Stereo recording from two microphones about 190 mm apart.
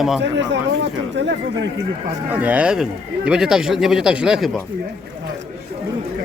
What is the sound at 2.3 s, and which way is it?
A man's voice, 10° right (ahead or behind).